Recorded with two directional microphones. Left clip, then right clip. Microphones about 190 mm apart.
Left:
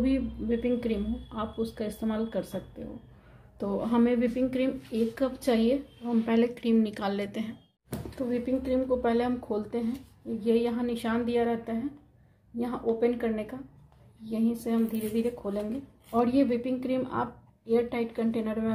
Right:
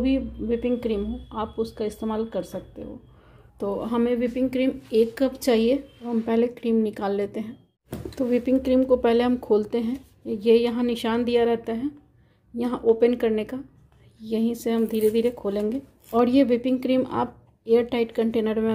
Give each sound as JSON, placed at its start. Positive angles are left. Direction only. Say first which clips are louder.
{"t": 0.0, "sound": "a woman's voice", "louder": "right 4 dB", "side_deg": -25}
{"t": 8.2, "sound": "speech", "louder": "right 8 dB", "side_deg": -45}